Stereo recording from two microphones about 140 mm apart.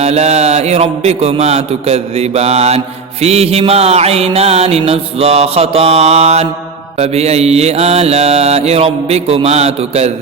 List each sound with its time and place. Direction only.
0.0 s a man's voice: 50° right (ahead or behind)